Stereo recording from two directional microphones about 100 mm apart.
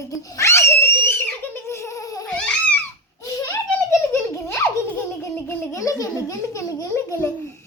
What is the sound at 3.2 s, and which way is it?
Giggle, 30° left (ahead or behind).